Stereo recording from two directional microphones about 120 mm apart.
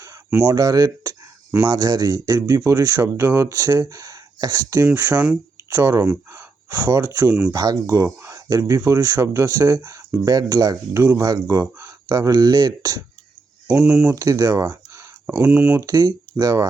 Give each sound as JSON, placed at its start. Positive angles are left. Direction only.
{"t": 0.4, "sound": "speech", "side_deg": -35}
{"t": 1.5, "sound": "speech", "side_deg": -20}
{"t": 1.7, "sound": "speech", "side_deg": -35}
{"t": 5.1, "sound": "speech", "side_deg": -10}
{"t": 5.7, "sound": "speech", "side_deg": -20}
{"t": 7.5, "sound": "speech", "side_deg": -30}
{"t": 13.7, "sound": "speech", "side_deg": -15}
{"t": 14.2, "sound": "speech", "side_deg": -30}
{"t": 15.3, "sound": "speech", "side_deg": -10}
{"t": 15.8, "sound": "speech", "side_deg": -30}